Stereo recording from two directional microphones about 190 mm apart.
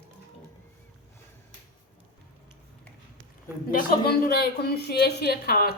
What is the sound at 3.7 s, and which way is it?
A woman's voice, 50° left (ahead or behind).